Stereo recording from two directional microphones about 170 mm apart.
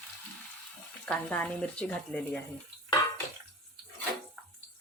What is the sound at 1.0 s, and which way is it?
Speech, 10° left (ahead or behind).